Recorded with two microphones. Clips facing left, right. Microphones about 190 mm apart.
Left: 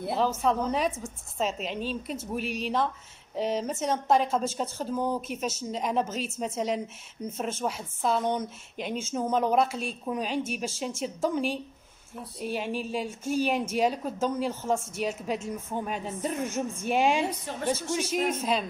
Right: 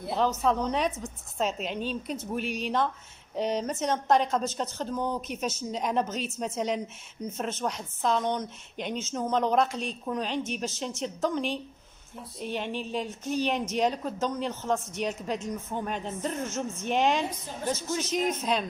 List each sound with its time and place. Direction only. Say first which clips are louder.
0.4 s speech: even; centre (ahead or behind)